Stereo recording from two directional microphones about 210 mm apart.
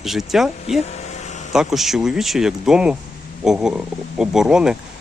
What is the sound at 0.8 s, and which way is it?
Vehicle, 30° left (ahead or behind).